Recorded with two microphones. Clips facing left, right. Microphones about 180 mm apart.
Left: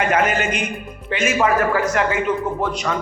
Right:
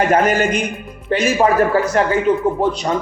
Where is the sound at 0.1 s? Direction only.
40° right (ahead or behind).